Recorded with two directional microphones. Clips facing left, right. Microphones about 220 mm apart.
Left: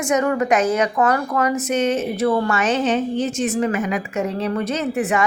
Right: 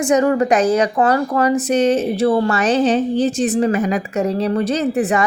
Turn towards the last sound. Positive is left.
turn(degrees=-35)  # may be behind; listen again after turning